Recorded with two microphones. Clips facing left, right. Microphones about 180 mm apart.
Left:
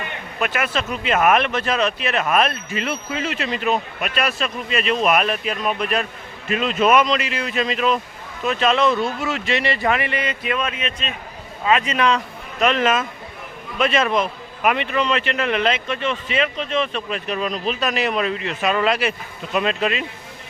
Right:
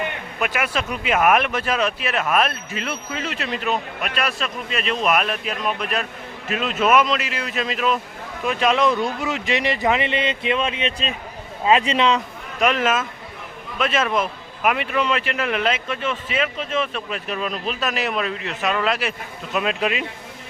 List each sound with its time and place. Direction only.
0.3 s a man's voice: 10° right (ahead or behind)
12.5 s a man's voice: 10° right (ahead or behind)